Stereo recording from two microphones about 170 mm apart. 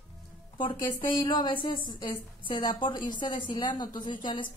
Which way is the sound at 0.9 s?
30° left (ahead or behind).